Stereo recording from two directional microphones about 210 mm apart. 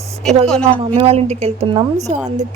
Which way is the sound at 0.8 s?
30° right (ahead or behind).